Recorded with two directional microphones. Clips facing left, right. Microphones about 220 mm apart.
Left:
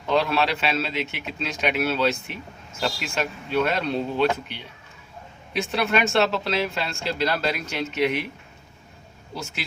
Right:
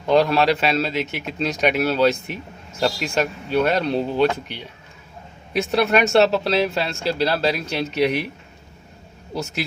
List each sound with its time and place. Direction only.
0.1 s speech: 40° right (ahead or behind)
5.5 s speech: 40° right (ahead or behind)
9.3 s speech: 40° right (ahead or behind)